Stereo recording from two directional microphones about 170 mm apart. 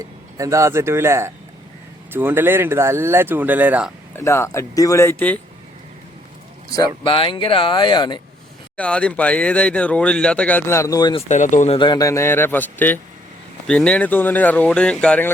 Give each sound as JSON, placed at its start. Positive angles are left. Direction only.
{"t": 0.0, "sound": "speech", "side_deg": -20}
{"t": 4.1, "sound": "speech", "side_deg": 15}
{"t": 6.7, "sound": "speech", "side_deg": 25}
{"t": 8.7, "sound": "speech", "side_deg": 5}
{"t": 11.3, "sound": "speech", "side_deg": 45}
{"t": 11.8, "sound": "speech", "side_deg": 25}